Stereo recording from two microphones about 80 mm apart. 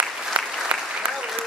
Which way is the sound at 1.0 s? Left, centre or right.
Right.